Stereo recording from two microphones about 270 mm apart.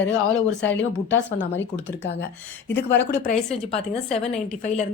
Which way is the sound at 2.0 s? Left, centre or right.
Left.